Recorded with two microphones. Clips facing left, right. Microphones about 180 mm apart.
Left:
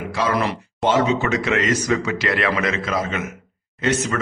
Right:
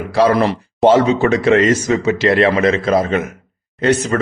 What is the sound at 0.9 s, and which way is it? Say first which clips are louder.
Speech: right 7 dB; 35° right (ahead or behind).